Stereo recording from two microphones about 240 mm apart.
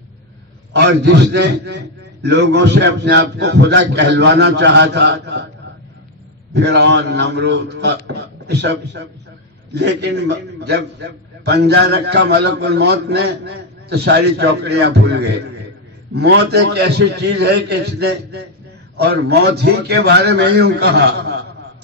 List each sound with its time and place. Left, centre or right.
0.7 s a man's voice: right
6.5 s a man's voice: right